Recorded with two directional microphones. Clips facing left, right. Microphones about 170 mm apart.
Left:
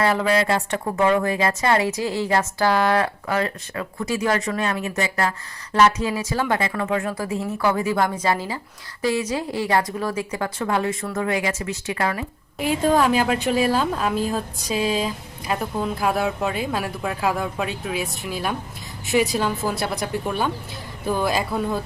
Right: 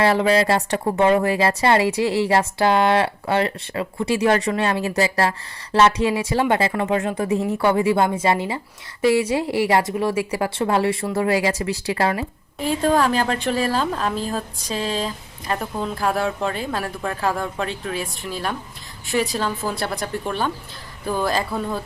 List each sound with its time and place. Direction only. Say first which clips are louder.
0.0 s speech: right 3 dB; 30° right (ahead or behind)
12.5 s a woman's voice: even; 10° left (ahead or behind)